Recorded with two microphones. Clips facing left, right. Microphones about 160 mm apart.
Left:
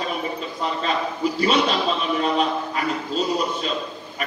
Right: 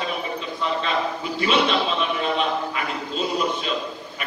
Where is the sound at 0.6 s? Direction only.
40° left (ahead or behind).